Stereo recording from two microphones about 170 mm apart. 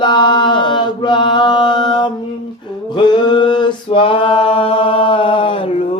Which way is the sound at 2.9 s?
25° left (ahead or behind).